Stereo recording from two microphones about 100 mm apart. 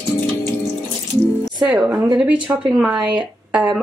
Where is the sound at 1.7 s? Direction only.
5° right (ahead or behind).